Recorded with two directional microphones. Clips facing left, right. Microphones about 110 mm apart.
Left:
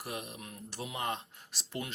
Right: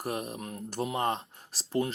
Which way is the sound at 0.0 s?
45° right (ahead or behind).